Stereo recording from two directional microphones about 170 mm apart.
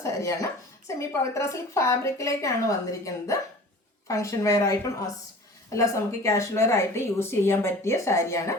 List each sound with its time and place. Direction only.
0.0 s a woman's voice: 20° left (ahead or behind)